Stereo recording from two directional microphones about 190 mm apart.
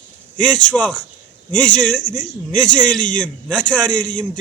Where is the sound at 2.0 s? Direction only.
40° left (ahead or behind).